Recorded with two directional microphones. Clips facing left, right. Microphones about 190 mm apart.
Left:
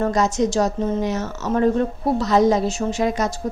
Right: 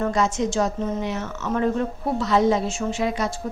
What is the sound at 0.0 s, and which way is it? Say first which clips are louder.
A woman's voice: left 3 dB; 40° left (ahead or behind).